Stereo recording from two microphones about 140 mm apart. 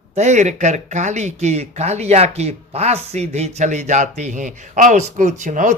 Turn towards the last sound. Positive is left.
turn(degrees=-65)  # may be behind; listen again after turning